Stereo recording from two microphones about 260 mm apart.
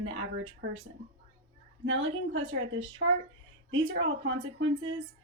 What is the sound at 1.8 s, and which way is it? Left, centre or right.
A woman's voice, right.